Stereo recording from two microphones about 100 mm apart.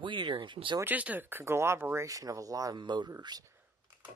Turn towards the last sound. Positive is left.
turn(degrees=-40)  # may be behind; listen again after turning